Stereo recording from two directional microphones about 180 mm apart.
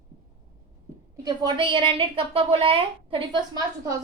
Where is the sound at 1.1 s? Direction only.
20° right (ahead or behind).